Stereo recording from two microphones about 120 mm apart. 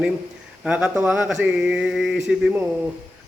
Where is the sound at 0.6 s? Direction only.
5° right (ahead or behind).